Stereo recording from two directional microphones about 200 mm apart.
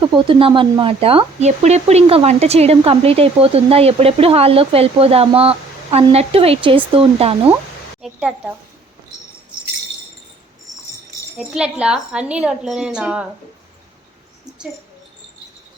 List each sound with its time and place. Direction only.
0.3 s speech: 25° right (ahead or behind)
8.0 s a woman's voice: 5° right (ahead or behind)
11.3 s a woman's voice: 5° right (ahead or behind)